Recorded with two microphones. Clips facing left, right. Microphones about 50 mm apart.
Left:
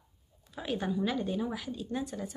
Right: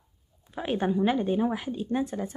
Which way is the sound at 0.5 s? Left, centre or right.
Right.